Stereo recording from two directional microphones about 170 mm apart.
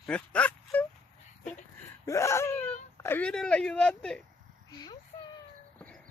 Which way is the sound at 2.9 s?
15° left (ahead or behind).